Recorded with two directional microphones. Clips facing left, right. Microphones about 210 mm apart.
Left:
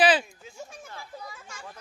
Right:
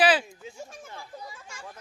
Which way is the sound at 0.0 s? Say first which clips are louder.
Left 1 dB; 5° right (ahead or behind).